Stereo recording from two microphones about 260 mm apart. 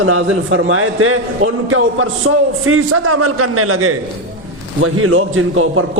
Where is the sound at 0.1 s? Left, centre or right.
Right.